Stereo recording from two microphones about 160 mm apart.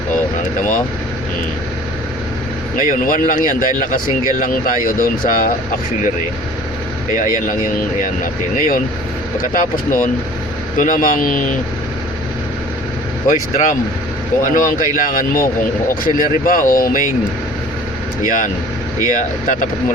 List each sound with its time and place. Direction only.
2.7 s speech: 60° left (ahead or behind)
8.2 s speech: 60° left (ahead or behind)
13.2 s speech: 50° left (ahead or behind)
18.2 s speech: 55° left (ahead or behind)